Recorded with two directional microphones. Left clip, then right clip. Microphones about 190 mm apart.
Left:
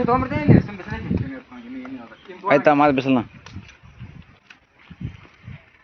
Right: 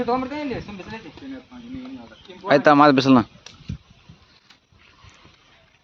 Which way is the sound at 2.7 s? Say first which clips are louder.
Right 3 dB; 30° right (ahead or behind).